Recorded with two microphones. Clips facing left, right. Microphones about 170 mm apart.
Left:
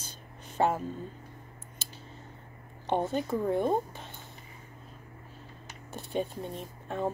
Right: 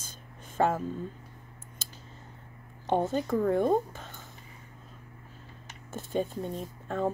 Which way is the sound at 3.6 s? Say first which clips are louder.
Right 2 dB; 45° right (ahead or behind).